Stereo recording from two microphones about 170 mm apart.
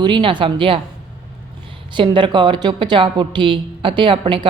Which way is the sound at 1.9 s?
30° right (ahead or behind).